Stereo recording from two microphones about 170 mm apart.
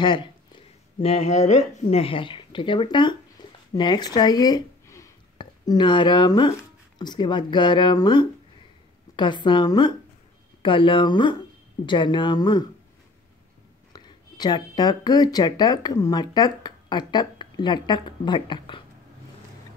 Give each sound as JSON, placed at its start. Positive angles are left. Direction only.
{"t": 0.0, "sound": "speech", "side_deg": 30}
{"t": 13.9, "sound": "speech", "side_deg": 25}